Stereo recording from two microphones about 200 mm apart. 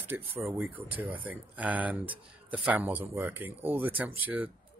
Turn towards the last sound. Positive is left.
turn(degrees=-10)  # may be behind; listen again after turning